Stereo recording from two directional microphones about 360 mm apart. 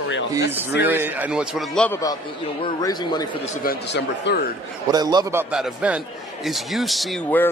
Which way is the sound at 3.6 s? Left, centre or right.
Left.